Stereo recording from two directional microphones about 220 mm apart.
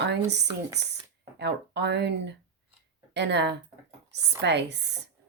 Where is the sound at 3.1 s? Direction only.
50° right (ahead or behind).